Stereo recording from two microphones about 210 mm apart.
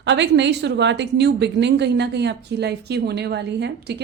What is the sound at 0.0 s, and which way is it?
A woman's voice, 55° right (ahead or behind).